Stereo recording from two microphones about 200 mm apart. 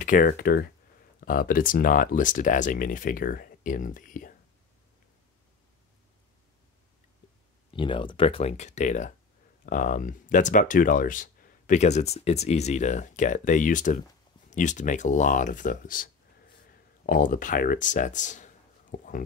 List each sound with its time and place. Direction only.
0.0 s speech: 45° left (ahead or behind)
7.7 s speech: 25° left (ahead or behind); by 19.2 s 40° left (ahead or behind)